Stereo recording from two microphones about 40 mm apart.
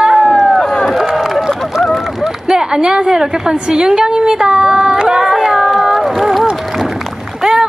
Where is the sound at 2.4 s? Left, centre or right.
Centre.